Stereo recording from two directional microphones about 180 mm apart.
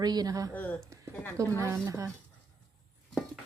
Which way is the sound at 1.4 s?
15° right (ahead or behind).